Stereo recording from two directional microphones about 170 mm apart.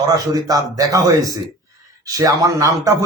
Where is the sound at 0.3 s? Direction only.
20° right (ahead or behind).